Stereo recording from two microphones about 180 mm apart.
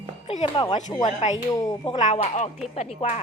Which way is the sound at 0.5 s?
25° left (ahead or behind).